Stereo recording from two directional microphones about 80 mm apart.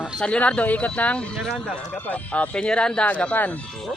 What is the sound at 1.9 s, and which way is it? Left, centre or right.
Speech, left.